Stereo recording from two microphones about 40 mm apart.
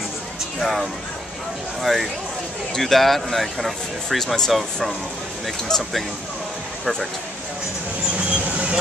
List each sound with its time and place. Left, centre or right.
0.6 s speech: centre
5.7 s speech: centre
8.3 s vehicle: right